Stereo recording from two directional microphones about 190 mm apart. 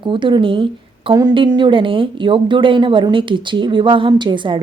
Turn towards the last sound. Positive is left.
turn(degrees=-25)  # may be behind; listen again after turning